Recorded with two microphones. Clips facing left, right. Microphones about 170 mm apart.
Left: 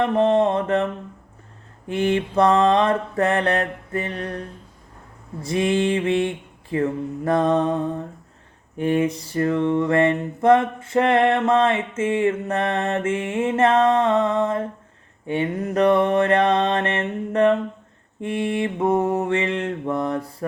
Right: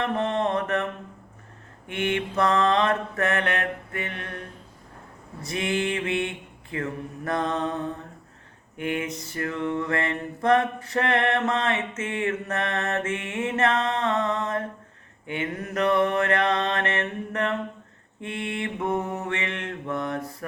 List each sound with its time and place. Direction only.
0.2 s mantra: 30° left (ahead or behind)
1.9 s mantra: 35° left (ahead or behind)